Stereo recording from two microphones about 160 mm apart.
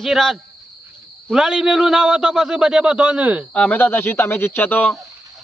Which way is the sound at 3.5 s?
10° left (ahead or behind).